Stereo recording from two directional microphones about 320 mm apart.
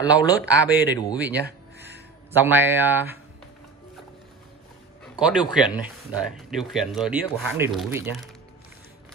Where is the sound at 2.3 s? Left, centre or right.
Centre.